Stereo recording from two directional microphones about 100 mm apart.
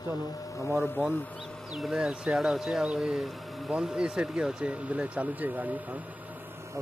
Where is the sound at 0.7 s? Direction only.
5° right (ahead or behind).